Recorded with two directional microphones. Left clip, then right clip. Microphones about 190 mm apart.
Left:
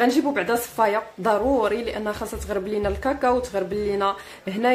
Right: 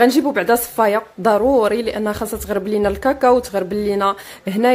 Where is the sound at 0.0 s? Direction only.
45° right (ahead or behind).